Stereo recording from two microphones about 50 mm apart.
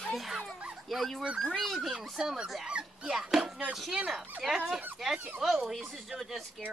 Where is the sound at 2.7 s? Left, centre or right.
Right.